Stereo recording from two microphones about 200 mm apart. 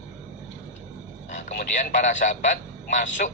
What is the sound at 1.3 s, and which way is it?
A man's voice, 35° left (ahead or behind).